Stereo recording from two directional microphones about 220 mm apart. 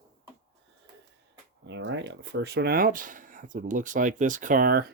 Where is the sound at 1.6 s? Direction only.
55° right (ahead or behind).